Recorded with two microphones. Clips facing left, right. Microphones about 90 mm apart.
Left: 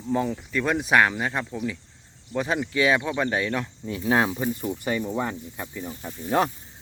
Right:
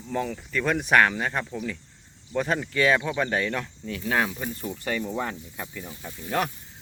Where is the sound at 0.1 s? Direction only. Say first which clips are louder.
Left 4 dB; 20° left (ahead or behind).